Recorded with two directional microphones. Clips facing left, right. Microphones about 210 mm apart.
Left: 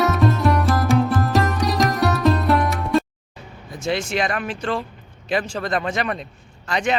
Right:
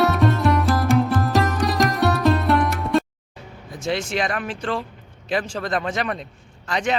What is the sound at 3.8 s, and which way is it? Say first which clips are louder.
Speech: left 1 dB; centre (ahead or behind).